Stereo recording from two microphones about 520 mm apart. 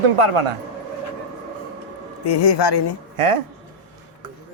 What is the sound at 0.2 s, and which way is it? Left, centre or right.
Speech, right.